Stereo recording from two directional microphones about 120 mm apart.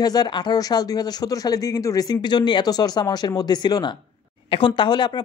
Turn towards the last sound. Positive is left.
turn(degrees=35)  # may be behind; listen again after turning